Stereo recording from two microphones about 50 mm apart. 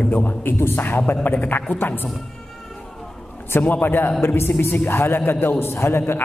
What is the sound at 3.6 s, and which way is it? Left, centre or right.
A man's voice, left.